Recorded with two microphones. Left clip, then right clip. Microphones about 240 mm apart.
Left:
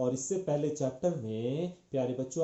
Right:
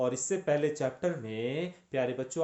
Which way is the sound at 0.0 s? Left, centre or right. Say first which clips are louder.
Right 2 dB; right.